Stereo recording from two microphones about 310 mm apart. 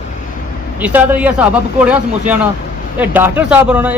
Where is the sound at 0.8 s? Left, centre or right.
Centre.